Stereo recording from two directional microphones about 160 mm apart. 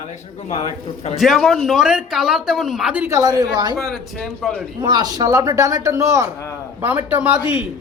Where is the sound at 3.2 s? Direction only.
25° right (ahead or behind).